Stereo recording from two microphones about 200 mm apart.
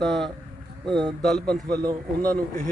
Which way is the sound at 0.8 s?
20° right (ahead or behind).